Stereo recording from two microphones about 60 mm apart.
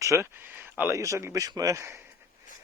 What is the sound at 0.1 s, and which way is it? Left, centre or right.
Speech, right.